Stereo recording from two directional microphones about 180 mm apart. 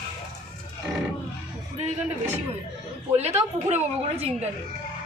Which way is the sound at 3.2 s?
35° right (ahead or behind).